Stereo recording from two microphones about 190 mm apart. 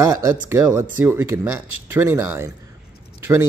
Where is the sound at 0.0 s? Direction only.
15° right (ahead or behind).